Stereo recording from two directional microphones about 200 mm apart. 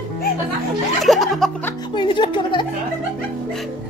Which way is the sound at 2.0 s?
25° left (ahead or behind).